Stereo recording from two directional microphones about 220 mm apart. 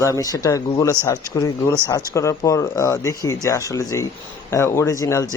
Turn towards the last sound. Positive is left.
turn(degrees=15)  # may be behind; listen again after turning